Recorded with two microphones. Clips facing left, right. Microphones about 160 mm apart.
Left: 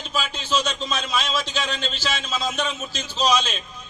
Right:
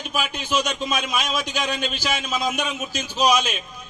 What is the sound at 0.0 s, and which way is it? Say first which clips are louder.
A man's voice: right 1 dB; 15° right (ahead or behind).